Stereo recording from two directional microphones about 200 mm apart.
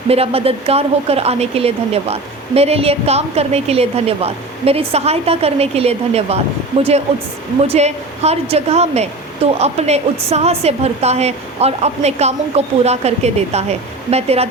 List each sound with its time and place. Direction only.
0.1 s a woman's voice: 30° right (ahead or behind)
7.7 s a woman's voice: 35° right (ahead or behind)